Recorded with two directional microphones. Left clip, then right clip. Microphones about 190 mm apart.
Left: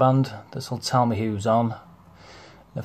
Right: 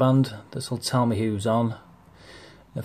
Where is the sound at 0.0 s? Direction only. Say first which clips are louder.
Left 2 dB; 20° right (ahead or behind).